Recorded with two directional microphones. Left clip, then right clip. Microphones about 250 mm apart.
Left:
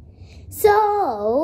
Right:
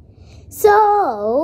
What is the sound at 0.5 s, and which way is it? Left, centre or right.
Speech, centre.